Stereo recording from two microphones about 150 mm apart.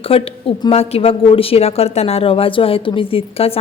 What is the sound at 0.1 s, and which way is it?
A woman's voice, 40° left (ahead or behind).